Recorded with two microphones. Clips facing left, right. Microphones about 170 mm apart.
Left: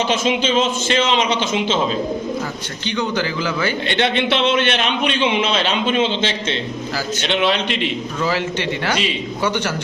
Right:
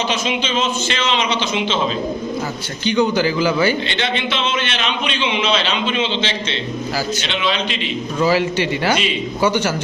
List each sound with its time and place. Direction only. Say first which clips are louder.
0.1 s a man's voice: left 3 dB; 50° left (ahead or behind)
2.8 s a man's voice: right 5 dB; 10° right (ahead or behind)
3.8 s a man's voice: left 4 dB; 55° left (ahead or behind)
7.3 s a man's voice: left 3 dB; 60° left (ahead or behind)
8.2 s a man's voice: right 5 dB; 10° right (ahead or behind)